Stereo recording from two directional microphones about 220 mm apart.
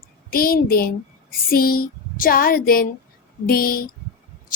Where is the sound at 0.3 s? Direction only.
40° left (ahead or behind).